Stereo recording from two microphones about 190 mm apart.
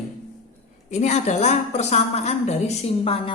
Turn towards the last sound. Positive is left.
turn(degrees=30)  # may be behind; listen again after turning